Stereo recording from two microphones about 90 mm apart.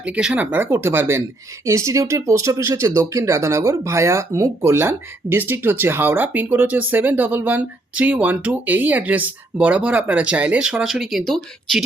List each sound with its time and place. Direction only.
0.0 s speech: 10° right (ahead or behind)
0.5 s speech: 25° right (ahead or behind); by 11.8 s 5° left (ahead or behind)